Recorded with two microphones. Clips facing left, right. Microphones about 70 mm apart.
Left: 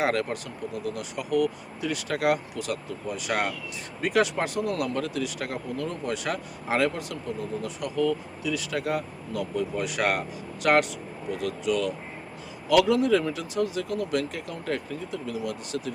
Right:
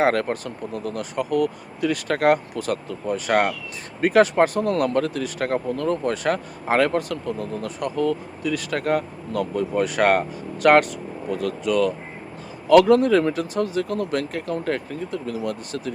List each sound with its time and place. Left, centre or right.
0.0 s speech: right